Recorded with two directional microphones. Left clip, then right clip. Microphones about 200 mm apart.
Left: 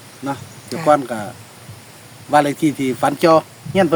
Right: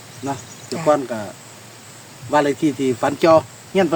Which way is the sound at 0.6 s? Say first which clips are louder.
Left 1 dB; 20° left (ahead or behind).